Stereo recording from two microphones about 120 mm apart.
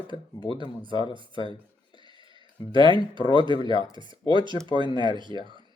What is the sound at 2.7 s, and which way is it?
Speech, 45° right (ahead or behind).